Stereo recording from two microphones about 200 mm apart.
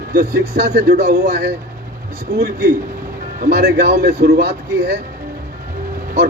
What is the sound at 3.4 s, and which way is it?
A man's voice, 50° right (ahead or behind).